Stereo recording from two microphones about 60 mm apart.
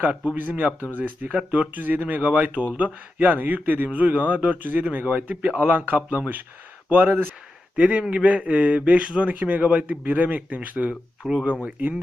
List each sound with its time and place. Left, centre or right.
0.0 s a man's voice: right
7.8 s a man's voice: right
11.2 s speech: centre